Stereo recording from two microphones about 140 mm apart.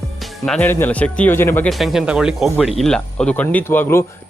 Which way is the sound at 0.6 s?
15° left (ahead or behind).